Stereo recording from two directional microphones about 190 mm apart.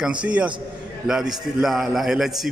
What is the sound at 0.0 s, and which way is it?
A man's voice, 5° right (ahead or behind).